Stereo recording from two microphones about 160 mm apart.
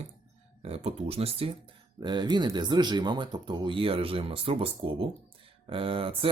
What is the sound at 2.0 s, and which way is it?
Speech, 25° right (ahead or behind).